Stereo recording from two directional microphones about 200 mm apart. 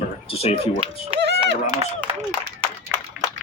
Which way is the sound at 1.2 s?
60° right (ahead or behind).